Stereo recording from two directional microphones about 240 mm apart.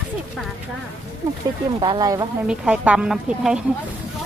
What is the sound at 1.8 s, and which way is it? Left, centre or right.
Speech, centre.